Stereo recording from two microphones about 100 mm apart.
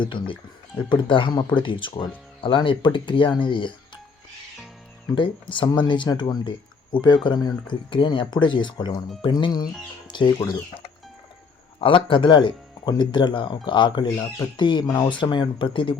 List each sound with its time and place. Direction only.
0.0 s speech: 55° left (ahead or behind)
5.1 s speech: 55° left (ahead or behind)
11.8 s speech: 60° left (ahead or behind)